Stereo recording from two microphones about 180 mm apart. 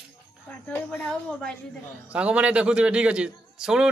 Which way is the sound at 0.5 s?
5° left (ahead or behind).